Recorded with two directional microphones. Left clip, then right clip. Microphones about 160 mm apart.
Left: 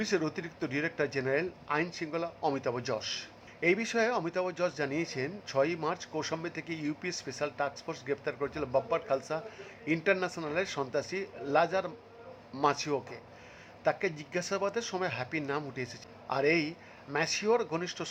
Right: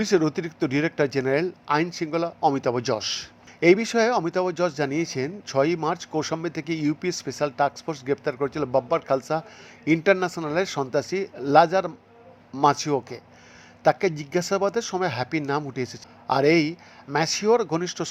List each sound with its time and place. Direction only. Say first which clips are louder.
0.0 s speech: right 10 dB; 35° right (ahead or behind)